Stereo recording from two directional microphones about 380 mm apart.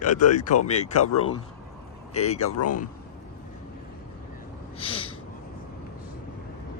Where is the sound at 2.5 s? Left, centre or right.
Left.